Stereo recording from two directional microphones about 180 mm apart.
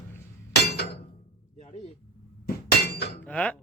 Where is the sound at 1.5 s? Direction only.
35° left (ahead or behind).